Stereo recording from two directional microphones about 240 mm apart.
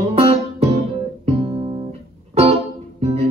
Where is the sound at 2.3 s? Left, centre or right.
Right.